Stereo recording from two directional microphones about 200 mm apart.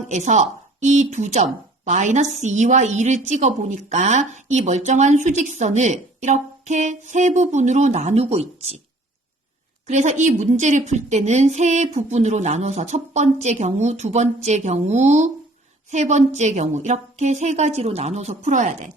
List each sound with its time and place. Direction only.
0.1 s a woman's voice: 35° right (ahead or behind)
9.8 s speech: 35° right (ahead or behind)